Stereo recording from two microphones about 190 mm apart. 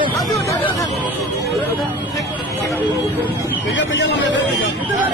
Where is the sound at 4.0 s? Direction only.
70° left (ahead or behind).